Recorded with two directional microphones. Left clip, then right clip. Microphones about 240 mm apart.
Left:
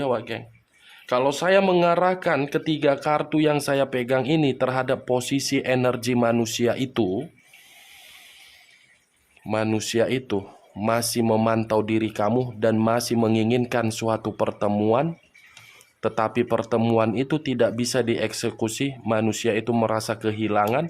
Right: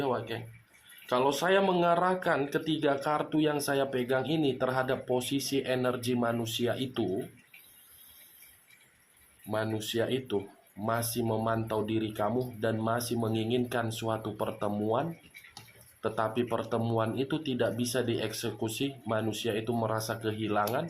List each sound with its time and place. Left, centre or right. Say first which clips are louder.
0.0 s speech: left 7 dB; left
9.5 s speech: left 8 dB; left